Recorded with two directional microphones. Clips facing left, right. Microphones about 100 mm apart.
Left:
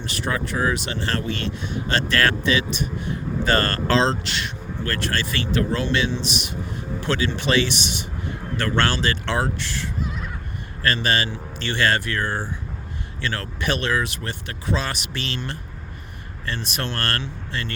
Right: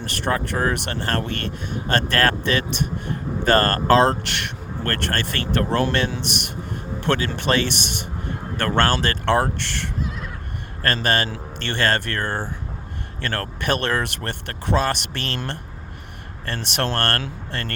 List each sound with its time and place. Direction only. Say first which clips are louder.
0.0 s speech: right 2 dB; 50° right (ahead or behind); by 9.9 s 65° right (ahead or behind)
10.8 s speech: right 1 dB; 50° right (ahead or behind)
16.5 s speech: right 4 dB; 65° right (ahead or behind)